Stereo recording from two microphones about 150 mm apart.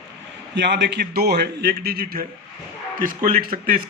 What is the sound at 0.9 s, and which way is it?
Speech, 90° right.